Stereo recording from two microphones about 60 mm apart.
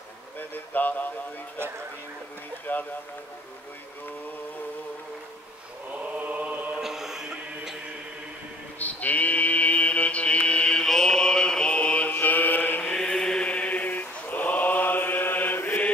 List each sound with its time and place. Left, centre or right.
0.7 s a sound: left
2.7 s a sound: left
5.9 s chant: right
6.8 s music: centre
8.7 s mantra: left
12.1 s mantra: left
12.9 s chant: centre; by 15.8 s left